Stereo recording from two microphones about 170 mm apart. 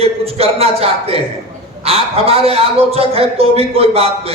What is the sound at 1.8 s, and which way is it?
A man's voice, 35° right (ahead or behind).